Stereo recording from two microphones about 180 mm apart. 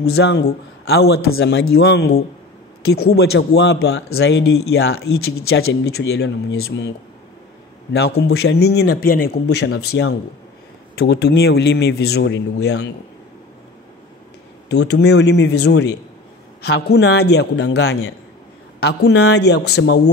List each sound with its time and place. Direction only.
0.0 s speech: 65° left (ahead or behind)
7.9 s speech: 65° left (ahead or behind)
14.7 s a man's voice: 70° left (ahead or behind)